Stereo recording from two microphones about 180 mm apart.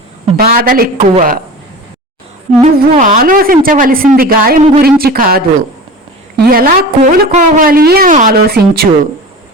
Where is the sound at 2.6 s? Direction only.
40° right (ahead or behind); by 8.9 s 60° right (ahead or behind).